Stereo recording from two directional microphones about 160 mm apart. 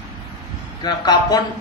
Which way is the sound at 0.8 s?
25° left (ahead or behind).